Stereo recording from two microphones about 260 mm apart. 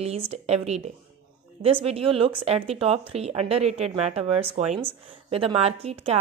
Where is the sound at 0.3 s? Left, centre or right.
Right.